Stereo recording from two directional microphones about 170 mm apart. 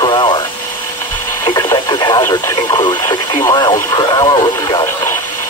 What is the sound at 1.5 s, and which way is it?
Radio, 25° left (ahead or behind).